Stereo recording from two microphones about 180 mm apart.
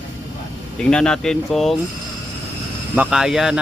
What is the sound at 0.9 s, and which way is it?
Speech, 5° left (ahead or behind).